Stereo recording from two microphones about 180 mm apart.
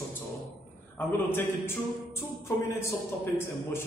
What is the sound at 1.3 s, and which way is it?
Speech, 10° left (ahead or behind).